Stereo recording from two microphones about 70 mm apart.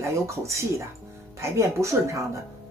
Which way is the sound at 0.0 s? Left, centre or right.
Right.